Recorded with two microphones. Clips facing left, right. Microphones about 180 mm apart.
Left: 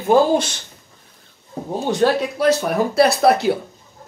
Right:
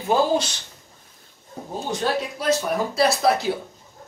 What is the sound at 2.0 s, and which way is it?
Speech, 65° left (ahead or behind).